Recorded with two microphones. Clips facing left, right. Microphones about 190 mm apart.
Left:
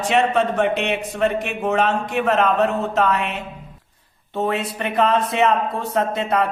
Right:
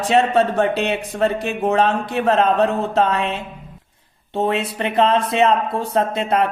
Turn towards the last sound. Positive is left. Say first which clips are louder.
# right 2 dB
turn(degrees=-25)  # may be behind; listen again after turning